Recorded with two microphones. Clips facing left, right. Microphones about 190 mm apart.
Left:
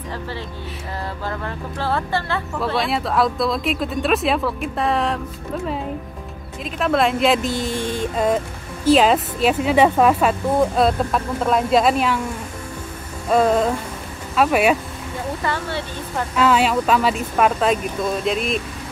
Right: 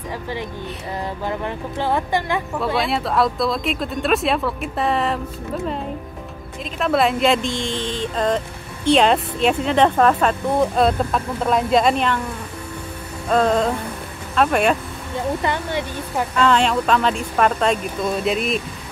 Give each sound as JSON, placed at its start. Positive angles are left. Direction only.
{"t": 1.2, "sound": "speech", "side_deg": -20}
{"t": 2.8, "sound": "speech", "side_deg": 0}
{"t": 6.6, "sound": "speech", "side_deg": 0}
{"t": 13.3, "sound": "a sound", "side_deg": 5}
{"t": 14.3, "sound": "speech", "side_deg": 5}
{"t": 15.4, "sound": "speech", "side_deg": -15}
{"t": 16.3, "sound": "speech", "side_deg": 5}